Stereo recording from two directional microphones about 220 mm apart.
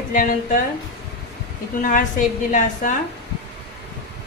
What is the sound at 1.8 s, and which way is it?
A woman's voice, 35° left (ahead or behind).